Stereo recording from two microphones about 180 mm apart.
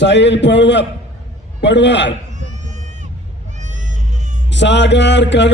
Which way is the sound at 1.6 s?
75° left (ahead or behind).